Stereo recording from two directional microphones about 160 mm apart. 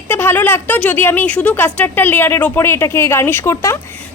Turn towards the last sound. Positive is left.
turn(degrees=15)  # may be behind; listen again after turning